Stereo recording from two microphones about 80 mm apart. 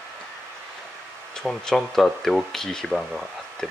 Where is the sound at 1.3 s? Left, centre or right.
Centre.